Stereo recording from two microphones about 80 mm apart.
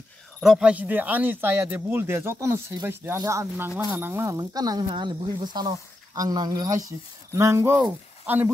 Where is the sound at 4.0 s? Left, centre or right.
Right.